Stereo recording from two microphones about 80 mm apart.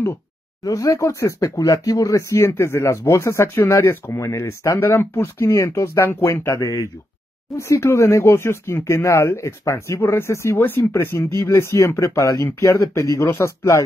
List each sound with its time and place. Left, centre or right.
0.7 s speech: left